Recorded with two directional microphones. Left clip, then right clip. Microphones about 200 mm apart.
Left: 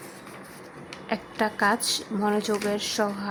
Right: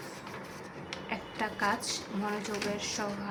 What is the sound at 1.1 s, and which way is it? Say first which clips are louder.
Speech: left 9 dB; 50° left (ahead or behind).